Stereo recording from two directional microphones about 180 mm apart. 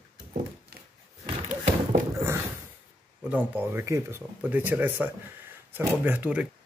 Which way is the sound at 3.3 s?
10° right (ahead or behind).